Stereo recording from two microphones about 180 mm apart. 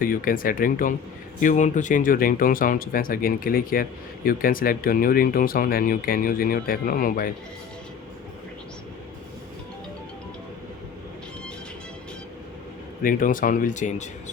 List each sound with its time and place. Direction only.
0.0 s speech: 50° left (ahead or behind)
13.0 s speech: 50° left (ahead or behind)